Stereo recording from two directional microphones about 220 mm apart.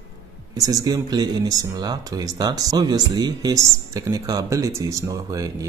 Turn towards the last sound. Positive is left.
turn(degrees=-15)  # may be behind; listen again after turning